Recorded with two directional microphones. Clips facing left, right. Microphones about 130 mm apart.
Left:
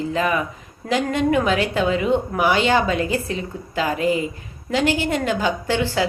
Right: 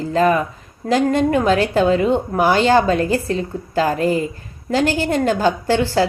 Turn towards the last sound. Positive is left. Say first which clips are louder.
# right 4 dB
turn(degrees=-35)  # may be behind; listen again after turning